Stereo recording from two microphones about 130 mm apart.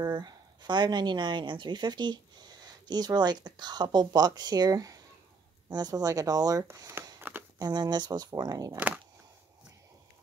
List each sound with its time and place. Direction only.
0.0 s a woman's voice: 30° right (ahead or behind); by 7.4 s 15° right (ahead or behind)
7.5 s a woman's voice: 30° right (ahead or behind)
8.7 s speech: 10° right (ahead or behind)